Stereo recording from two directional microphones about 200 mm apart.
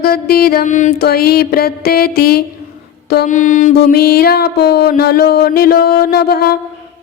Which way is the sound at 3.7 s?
50° left (ahead or behind).